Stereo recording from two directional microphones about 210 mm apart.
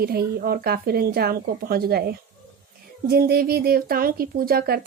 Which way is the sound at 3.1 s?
45° right (ahead or behind).